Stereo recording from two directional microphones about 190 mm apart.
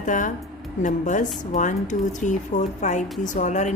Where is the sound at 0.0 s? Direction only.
40° left (ahead or behind).